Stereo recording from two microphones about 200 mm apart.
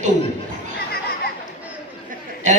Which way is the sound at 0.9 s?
50° left (ahead or behind).